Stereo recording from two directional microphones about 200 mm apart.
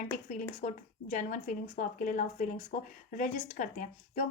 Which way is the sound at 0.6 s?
40° left (ahead or behind).